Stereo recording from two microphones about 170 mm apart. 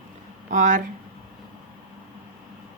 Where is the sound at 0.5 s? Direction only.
50° right (ahead or behind).